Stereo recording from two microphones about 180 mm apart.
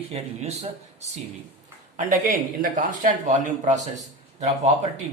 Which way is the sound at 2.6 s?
45° right (ahead or behind).